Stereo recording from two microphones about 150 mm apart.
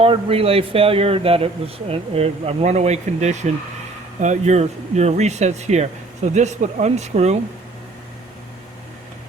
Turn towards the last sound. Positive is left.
turn(degrees=-45)  # may be behind; listen again after turning